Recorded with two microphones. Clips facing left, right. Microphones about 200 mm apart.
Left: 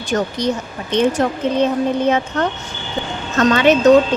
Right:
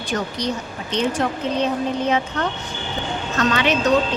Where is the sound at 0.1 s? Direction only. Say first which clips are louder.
Left 6 dB; 50° left (ahead or behind).